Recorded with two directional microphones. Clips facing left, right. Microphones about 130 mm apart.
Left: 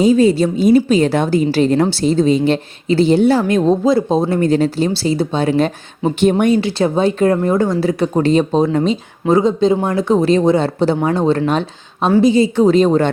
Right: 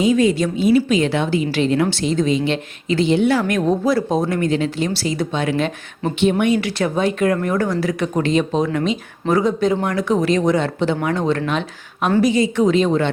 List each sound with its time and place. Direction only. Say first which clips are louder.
0.0 s a woman's voice: left 4 dB; 35° left (ahead or behind)